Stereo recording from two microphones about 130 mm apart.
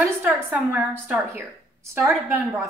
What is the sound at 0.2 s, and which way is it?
A woman's voice, 15° right (ahead or behind).